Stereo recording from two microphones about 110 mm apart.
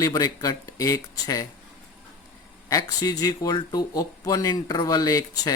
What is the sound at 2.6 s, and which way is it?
Speech, 35° left (ahead or behind).